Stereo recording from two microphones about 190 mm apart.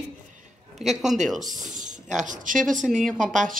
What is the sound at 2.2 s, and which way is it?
Speech, 45° right (ahead or behind).